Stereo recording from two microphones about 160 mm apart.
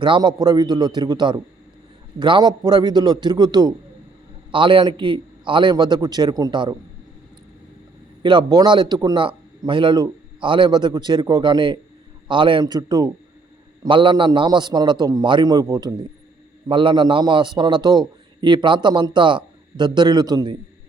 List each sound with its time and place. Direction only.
0.0 s a man's voice: 30° right (ahead or behind)
8.2 s a man's voice: 30° right (ahead or behind)